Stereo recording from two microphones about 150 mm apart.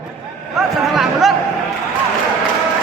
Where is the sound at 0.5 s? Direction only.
Centre (ahead or behind).